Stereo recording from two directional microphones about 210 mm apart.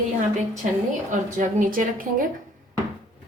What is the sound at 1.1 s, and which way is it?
A woman's voice, 40° right (ahead or behind).